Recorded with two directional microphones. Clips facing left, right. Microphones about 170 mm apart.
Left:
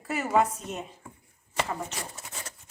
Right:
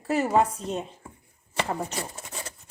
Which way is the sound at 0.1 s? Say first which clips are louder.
Right 3 dB; 30° right (ahead or behind).